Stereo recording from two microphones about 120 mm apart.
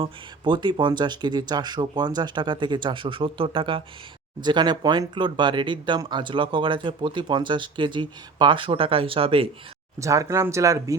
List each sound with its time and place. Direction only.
0.0 s speech: 40° right (ahead or behind)
10.0 s speech: 25° right (ahead or behind)